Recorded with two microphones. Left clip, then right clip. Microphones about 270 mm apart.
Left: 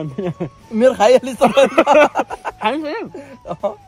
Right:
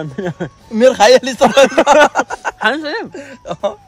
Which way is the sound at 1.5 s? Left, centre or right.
Right.